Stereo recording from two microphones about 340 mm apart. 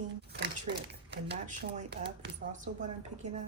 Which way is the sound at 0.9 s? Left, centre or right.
Right.